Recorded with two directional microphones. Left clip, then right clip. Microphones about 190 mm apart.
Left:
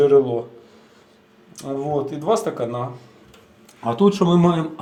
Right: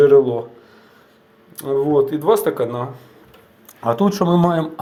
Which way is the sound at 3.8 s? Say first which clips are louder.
Even; 30° right (ahead or behind).